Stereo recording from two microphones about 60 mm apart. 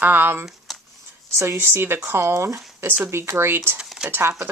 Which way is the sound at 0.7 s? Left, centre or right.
Centre.